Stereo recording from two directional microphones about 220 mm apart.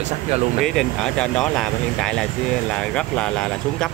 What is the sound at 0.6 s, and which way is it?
Speech, centre (ahead or behind).